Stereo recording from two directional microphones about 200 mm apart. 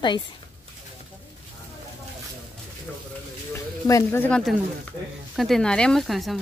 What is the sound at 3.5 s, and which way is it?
Speech, 15° left (ahead or behind).